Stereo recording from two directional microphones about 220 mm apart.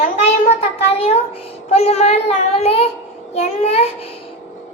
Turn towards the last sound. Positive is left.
turn(degrees=30)  # may be behind; listen again after turning